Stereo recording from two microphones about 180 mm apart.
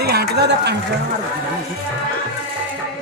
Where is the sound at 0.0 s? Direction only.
60° right (ahead or behind).